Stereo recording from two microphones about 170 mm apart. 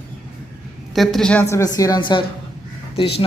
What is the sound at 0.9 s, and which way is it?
Speech, centre (ahead or behind).